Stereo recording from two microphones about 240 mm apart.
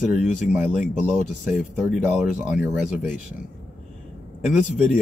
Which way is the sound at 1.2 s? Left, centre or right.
Left.